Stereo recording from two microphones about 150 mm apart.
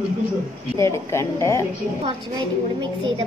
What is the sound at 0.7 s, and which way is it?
Speech, 20° left (ahead or behind).